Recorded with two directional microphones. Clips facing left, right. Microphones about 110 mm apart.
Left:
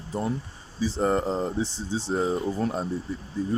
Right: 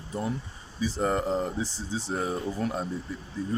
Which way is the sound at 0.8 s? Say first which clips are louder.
Left 3 dB; 30° left (ahead or behind).